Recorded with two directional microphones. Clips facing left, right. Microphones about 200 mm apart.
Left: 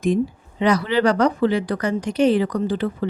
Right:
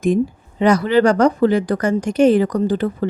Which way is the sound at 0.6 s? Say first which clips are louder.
Right 4 dB; 45° right (ahead or behind).